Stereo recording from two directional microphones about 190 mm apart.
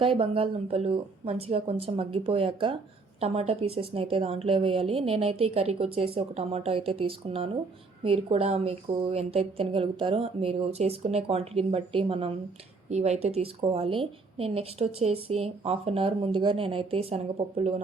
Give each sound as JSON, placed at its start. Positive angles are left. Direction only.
{"t": 0.0, "sound": "a woman's voice", "side_deg": -30}